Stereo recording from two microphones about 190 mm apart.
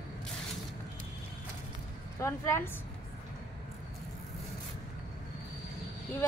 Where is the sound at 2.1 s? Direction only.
15° left (ahead or behind).